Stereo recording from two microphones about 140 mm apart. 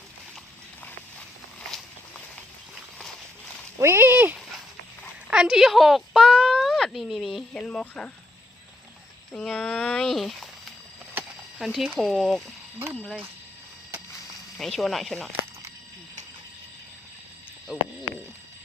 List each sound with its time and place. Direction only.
3.8 s a sound: 15° right (ahead or behind)
5.3 s speech: 5° right (ahead or behind)
9.3 s speech: 5° left (ahead or behind)
14.6 s speech: centre (ahead or behind)
17.7 s speech: 5° right (ahead or behind)